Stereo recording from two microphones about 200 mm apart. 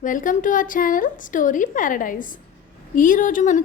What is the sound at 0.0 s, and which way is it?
A woman's voice, 40° left (ahead or behind).